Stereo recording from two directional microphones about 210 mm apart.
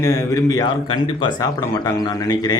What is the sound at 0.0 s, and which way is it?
A man's voice, 15° left (ahead or behind).